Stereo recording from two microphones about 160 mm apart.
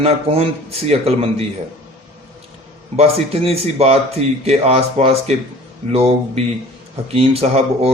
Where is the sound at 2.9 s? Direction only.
40° right (ahead or behind).